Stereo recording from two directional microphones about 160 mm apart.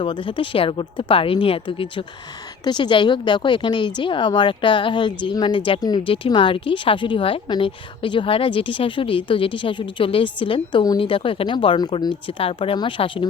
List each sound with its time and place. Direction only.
0.0 s speech: 30° left (ahead or behind)